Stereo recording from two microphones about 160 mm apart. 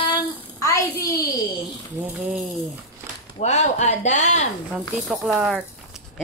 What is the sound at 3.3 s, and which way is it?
Speech, 45° left (ahead or behind).